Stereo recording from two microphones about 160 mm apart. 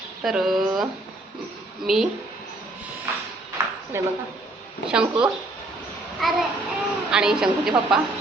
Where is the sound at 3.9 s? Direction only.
15° right (ahead or behind).